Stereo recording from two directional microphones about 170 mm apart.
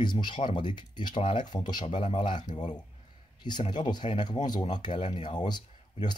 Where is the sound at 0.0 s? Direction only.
25° left (ahead or behind).